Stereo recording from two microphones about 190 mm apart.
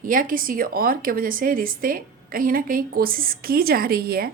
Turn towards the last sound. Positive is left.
turn(degrees=-50)  # may be behind; listen again after turning